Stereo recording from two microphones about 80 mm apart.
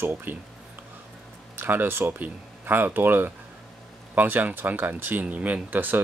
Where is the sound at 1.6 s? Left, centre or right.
Right.